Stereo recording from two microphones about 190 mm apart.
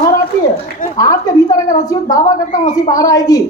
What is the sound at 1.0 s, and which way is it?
A woman's voice, 20° left (ahead or behind).